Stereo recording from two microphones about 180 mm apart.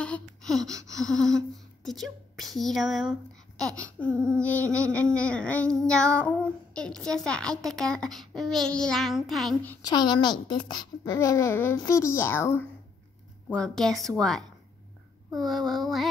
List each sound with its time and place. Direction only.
0.0 s a sound: 5° left (ahead or behind)
0.9 s child singing: 5° left (ahead or behind)
4.1 s a sound: 15° right (ahead or behind)
4.4 s a child's voice: 10° left (ahead or behind)
4.9 s child singing: 5° left (ahead or behind)
9.8 s a woman's voice: 20° left (ahead or behind)
13.5 s child singing: 5° left (ahead or behind)